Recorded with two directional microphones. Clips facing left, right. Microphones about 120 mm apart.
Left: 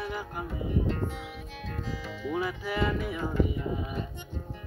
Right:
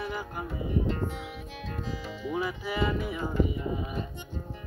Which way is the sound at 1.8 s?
15° right (ahead or behind).